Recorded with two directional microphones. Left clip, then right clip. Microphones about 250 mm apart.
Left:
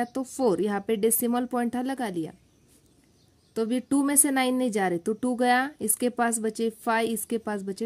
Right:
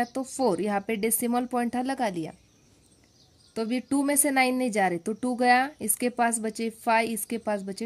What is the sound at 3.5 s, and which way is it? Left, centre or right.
A woman's voice, centre.